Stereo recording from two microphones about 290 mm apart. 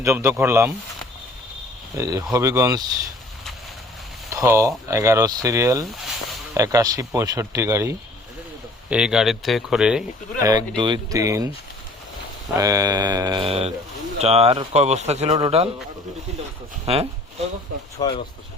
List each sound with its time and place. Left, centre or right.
0.0 s speech: centre
2.0 s speech: centre
4.3 s speech: centre
10.4 s speech: centre
12.5 s speech: centre
16.8 s speech: right
18.0 s speech: centre